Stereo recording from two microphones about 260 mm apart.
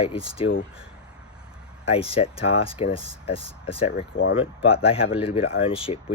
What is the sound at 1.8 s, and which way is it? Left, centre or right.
Speech, left.